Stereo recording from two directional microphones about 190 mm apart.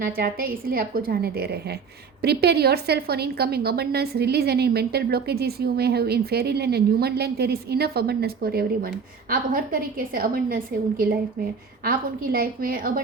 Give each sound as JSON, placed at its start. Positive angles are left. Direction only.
{"t": 0.0, "sound": "a woman's voice", "side_deg": -50}